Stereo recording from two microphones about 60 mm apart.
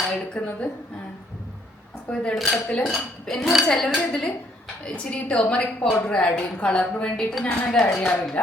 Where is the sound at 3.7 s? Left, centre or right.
Centre.